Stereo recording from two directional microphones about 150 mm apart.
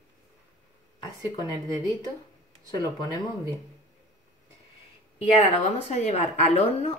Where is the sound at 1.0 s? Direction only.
25° left (ahead or behind).